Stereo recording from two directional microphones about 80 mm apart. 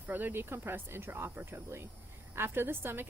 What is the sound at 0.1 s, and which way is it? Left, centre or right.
A woman's voice, right.